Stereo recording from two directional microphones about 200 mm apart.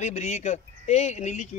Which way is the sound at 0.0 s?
35° left (ahead or behind).